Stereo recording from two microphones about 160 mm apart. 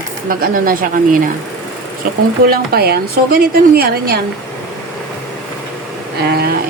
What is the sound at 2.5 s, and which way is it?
A woman's voice, 75° right (ahead or behind).